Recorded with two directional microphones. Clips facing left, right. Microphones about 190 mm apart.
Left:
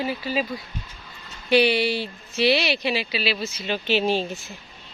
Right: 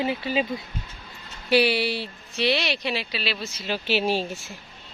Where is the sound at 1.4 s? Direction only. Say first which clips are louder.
Left 2 dB; 5° right (ahead or behind).